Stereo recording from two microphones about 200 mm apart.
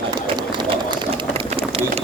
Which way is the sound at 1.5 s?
30° right (ahead or behind).